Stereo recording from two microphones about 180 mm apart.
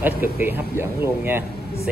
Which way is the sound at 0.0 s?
10° right (ahead or behind).